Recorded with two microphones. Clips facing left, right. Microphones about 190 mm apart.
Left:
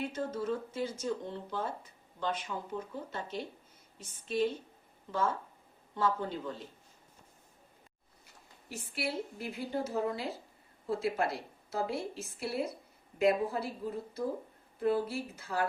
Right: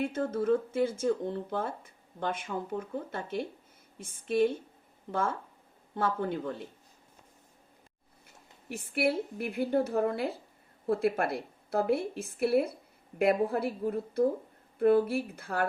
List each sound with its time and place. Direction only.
0.0 s speech: 55° right (ahead or behind)
6.0 s a woman's voice: 55° right (ahead or behind)
8.7 s a woman's voice: 55° right (ahead or behind)